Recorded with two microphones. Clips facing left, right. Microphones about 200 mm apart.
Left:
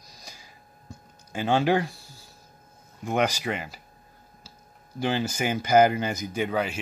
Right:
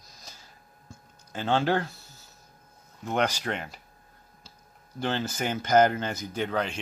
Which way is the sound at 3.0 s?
10° left (ahead or behind).